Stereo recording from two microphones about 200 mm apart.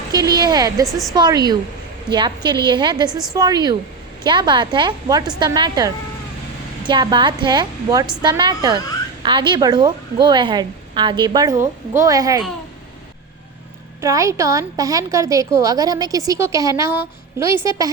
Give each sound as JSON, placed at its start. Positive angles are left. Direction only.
{"t": 0.1, "sound": "a woman's voice", "side_deg": -20}
{"t": 0.9, "sound": "a woman's voice", "side_deg": 0}
{"t": 1.1, "sound": "a woman's voice", "side_deg": -20}
{"t": 3.1, "sound": "a woman's voice", "side_deg": 0}
{"t": 3.3, "sound": "a woman's voice", "side_deg": -20}
{"t": 14.0, "sound": "a woman's voice", "side_deg": -15}